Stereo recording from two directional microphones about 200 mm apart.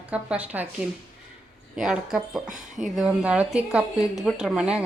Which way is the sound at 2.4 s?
40° right (ahead or behind).